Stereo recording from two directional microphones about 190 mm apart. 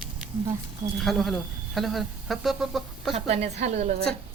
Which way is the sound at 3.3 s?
35° right (ahead or behind).